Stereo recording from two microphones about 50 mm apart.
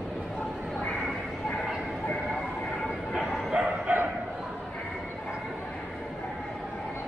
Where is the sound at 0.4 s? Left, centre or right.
Centre.